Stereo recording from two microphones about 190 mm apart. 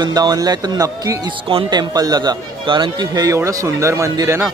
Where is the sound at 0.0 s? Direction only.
20° right (ahead or behind).